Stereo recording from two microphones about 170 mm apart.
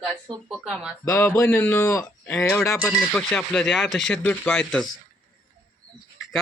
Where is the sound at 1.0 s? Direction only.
15° left (ahead or behind).